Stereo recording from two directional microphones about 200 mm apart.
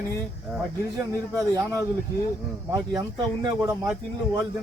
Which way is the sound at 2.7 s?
20° right (ahead or behind).